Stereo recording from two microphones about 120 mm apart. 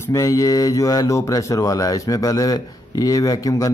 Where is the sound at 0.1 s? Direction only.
25° left (ahead or behind).